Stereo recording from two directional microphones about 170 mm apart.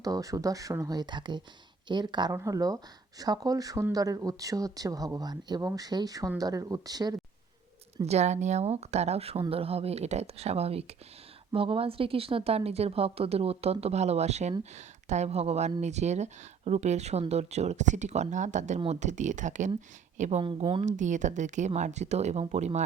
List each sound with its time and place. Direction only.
0.0 s speech: 20° right (ahead or behind)
8.0 s speech: 40° right (ahead or behind)
20.4 s speech: 30° right (ahead or behind)
20.8 s speech: 45° right (ahead or behind)